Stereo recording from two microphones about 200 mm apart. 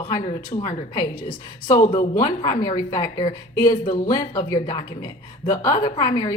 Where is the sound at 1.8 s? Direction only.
40° left (ahead or behind).